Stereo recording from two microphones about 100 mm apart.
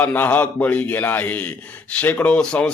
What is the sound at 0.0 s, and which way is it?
A man's voice, 20° left (ahead or behind).